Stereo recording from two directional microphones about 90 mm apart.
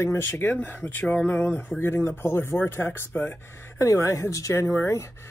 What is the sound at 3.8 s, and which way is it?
Speech, 35° left (ahead or behind).